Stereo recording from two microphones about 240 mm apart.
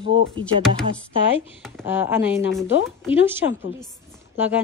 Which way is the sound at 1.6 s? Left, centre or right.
Centre.